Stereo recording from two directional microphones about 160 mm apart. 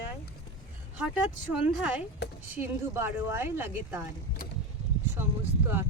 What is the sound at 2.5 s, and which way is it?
Speech, 15° right (ahead or behind).